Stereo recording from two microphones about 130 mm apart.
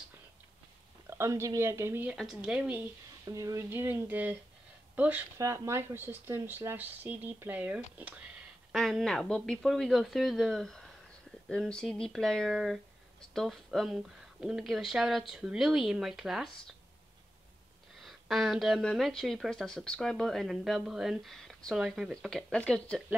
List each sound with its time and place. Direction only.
1.1 s speech: 20° right (ahead or behind)
2.1 s speech: 5° right (ahead or behind)
3.3 s speech: 25° right (ahead or behind)
8.7 s speech: centre (ahead or behind)
18.0 s speech: centre (ahead or behind)